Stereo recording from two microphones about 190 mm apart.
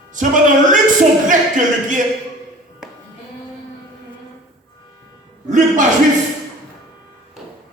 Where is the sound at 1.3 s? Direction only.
40° right (ahead or behind).